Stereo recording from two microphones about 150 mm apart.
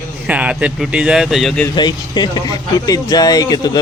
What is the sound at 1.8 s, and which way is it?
Speech, 30° left (ahead or behind).